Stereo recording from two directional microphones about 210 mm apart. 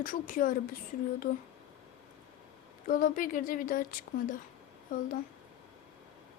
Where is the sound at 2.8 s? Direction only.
40° left (ahead or behind).